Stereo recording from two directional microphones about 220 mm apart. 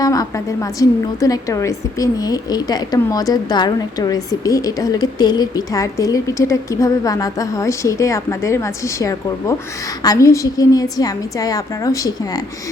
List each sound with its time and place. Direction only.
0.0 s a woman's voice: 15° left (ahead or behind)